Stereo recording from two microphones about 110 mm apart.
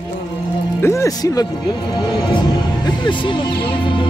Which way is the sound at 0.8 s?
25° left (ahead or behind).